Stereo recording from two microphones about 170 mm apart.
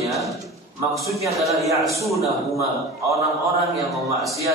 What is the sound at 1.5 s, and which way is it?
A man's voice, 20° right (ahead or behind).